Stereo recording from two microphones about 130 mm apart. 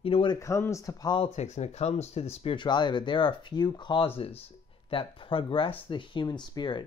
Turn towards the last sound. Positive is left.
turn(degrees=35)  # may be behind; listen again after turning